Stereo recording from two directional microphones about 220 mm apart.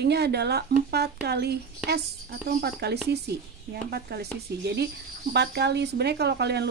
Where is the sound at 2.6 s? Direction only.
45° right (ahead or behind).